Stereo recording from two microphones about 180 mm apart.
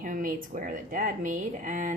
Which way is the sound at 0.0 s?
50° right (ahead or behind).